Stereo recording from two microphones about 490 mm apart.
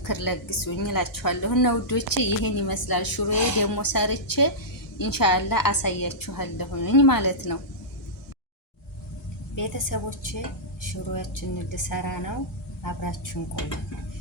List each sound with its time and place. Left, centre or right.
0.0 s a woman's voice: left
9.6 s a woman's voice: left